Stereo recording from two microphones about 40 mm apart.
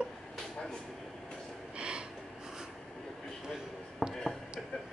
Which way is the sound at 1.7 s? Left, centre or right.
Right.